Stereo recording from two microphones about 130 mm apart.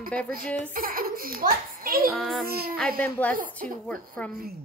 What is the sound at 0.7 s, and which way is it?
A child's voice, 90° right.